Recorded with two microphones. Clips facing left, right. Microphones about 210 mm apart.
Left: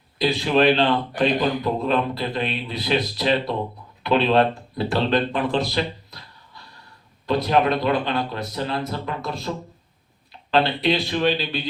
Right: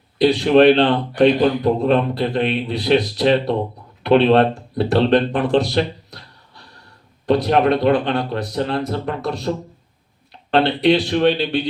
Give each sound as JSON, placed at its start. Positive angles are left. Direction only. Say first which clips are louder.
{"t": 0.2, "sound": "a man's voice", "louder": "right 7 dB", "side_deg": -70}